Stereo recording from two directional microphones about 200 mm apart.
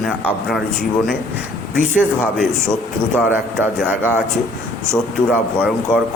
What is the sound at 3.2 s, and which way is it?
Speech, 10° right (ahead or behind).